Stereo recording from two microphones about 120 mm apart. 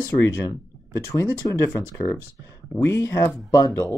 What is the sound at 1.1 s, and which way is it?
Speech, 25° left (ahead or behind).